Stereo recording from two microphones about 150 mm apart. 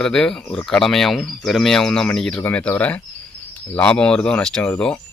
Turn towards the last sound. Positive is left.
turn(degrees=5)  # may be behind; listen again after turning